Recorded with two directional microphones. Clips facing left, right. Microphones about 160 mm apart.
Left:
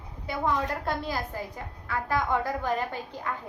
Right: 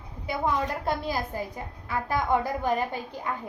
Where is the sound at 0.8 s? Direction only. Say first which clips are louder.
Right 2 dB; 15° right (ahead or behind).